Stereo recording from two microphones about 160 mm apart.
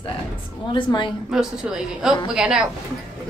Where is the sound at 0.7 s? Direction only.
30° left (ahead or behind).